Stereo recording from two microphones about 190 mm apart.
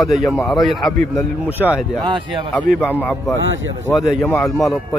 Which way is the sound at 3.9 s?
Centre (ahead or behind).